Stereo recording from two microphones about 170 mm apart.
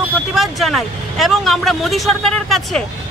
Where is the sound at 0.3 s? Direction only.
Centre (ahead or behind).